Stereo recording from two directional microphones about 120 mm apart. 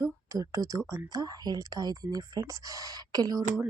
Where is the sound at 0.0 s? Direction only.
25° right (ahead or behind).